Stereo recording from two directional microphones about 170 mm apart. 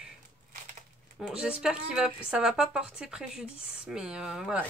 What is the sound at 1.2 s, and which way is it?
Speech, 5° right (ahead or behind).